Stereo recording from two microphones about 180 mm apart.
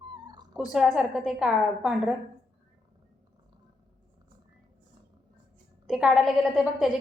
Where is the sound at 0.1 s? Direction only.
25° right (ahead or behind).